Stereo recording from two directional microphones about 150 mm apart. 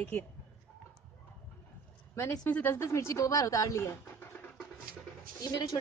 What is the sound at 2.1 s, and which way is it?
A woman's voice, 15° left (ahead or behind).